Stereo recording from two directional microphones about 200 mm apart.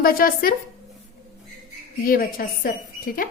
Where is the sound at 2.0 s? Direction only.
45° left (ahead or behind).